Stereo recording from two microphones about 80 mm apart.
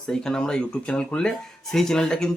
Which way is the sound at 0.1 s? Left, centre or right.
Centre.